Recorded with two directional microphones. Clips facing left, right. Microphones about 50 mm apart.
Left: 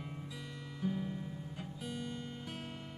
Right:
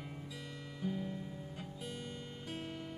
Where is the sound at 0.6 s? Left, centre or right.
Centre.